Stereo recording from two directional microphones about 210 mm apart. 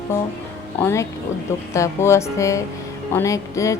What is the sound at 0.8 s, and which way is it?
A woman's voice, 15° left (ahead or behind).